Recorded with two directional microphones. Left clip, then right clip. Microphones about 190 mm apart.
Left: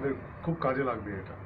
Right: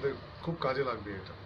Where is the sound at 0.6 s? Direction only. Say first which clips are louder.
Left 2 dB; 15° right (ahead or behind).